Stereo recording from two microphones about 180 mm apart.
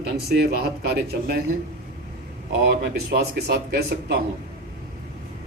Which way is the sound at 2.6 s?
70° right (ahead or behind).